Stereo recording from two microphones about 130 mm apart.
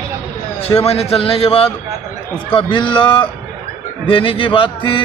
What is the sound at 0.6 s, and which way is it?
A man's voice, 50° left (ahead or behind).